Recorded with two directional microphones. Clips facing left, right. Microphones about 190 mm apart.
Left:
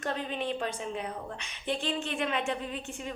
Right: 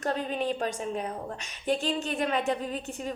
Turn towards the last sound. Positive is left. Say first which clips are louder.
# right 4 dB
turn(degrees=-40)  # may be behind; listen again after turning